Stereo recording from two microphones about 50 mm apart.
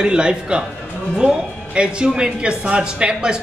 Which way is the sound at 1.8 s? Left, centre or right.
Centre.